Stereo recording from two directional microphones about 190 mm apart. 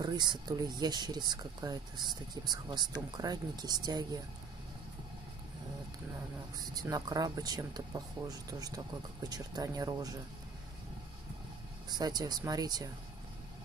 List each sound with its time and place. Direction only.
0.0 s speech: 20° right (ahead or behind)
6.6 s speech: 20° right (ahead or behind)
11.9 s speech: 20° right (ahead or behind)